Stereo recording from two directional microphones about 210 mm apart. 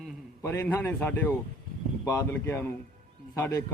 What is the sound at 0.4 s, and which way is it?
Speech, 10° left (ahead or behind).